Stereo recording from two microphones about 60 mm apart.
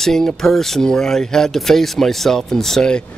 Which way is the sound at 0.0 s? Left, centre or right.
Centre.